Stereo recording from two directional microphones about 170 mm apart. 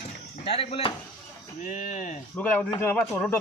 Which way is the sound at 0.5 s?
35° left (ahead or behind).